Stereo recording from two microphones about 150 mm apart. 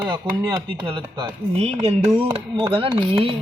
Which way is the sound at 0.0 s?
30° right (ahead or behind).